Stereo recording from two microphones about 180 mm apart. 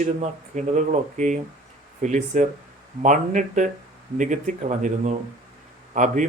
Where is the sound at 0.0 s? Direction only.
40° right (ahead or behind).